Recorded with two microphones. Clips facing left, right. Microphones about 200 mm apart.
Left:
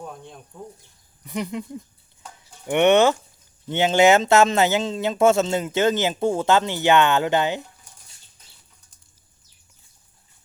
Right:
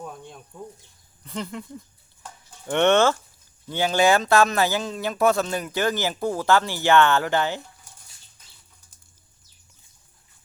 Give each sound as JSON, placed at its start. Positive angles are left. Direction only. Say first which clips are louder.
{"t": 1.2, "sound": "speech", "louder": "left 4 dB", "side_deg": 15}